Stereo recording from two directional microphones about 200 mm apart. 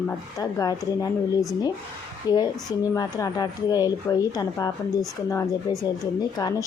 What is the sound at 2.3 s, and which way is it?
A woman's voice, 20° left (ahead or behind).